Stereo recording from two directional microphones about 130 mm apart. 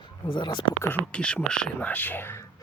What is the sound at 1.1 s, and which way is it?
Speech, 10° left (ahead or behind).